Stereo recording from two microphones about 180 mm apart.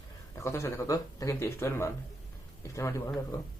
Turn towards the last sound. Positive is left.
turn(degrees=15)  # may be behind; listen again after turning